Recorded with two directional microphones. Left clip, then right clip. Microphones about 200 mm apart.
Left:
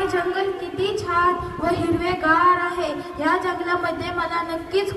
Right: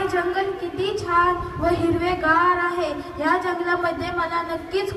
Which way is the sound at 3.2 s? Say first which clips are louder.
Even; 30° right (ahead or behind).